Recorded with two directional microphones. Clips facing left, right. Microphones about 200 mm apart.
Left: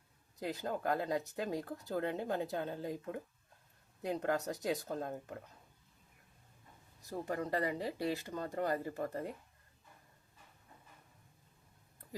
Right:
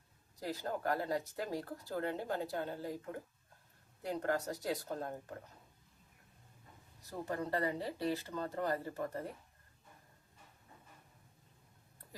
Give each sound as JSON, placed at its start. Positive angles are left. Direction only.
{"t": 0.3, "sound": "speech", "side_deg": 20}
{"t": 7.3, "sound": "speech", "side_deg": 15}